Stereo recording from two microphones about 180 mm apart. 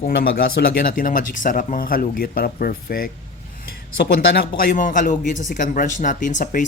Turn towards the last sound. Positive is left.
turn(degrees=45)  # may be behind; listen again after turning